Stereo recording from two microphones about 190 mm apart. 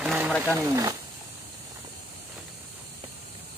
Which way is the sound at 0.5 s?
15° right (ahead or behind).